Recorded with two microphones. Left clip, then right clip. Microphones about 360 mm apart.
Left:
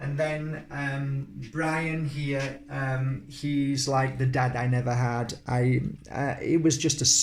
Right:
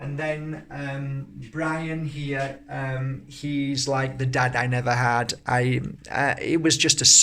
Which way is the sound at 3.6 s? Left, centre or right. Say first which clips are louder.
Right 1 dB; right.